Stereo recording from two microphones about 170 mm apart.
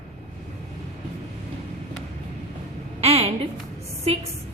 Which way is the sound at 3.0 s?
35° right (ahead or behind).